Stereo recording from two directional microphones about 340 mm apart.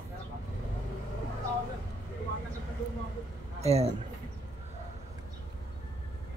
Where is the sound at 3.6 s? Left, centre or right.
Centre.